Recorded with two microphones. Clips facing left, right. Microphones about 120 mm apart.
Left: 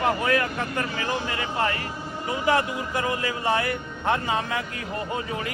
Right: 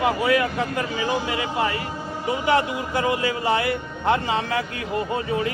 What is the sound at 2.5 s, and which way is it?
Speech, 30° right (ahead or behind).